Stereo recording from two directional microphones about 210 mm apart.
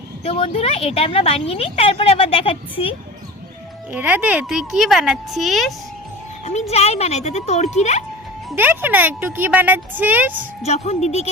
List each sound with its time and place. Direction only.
0.3 s a woman's voice: 30° left (ahead or behind)
3.9 s speech: 5° right (ahead or behind)
6.4 s speech: 30° left (ahead or behind)
8.4 s speech: 10° right (ahead or behind)
10.6 s speech: 30° left (ahead or behind)